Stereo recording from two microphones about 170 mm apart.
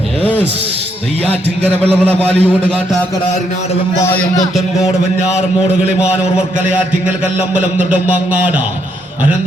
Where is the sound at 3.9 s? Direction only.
15° left (ahead or behind).